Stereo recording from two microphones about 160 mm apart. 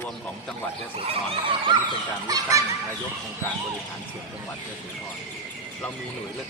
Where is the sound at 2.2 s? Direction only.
20° right (ahead or behind).